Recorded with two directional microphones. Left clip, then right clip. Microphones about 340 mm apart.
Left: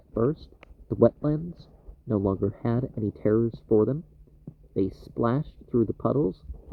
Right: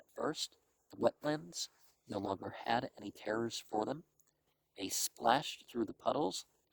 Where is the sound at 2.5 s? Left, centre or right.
Centre.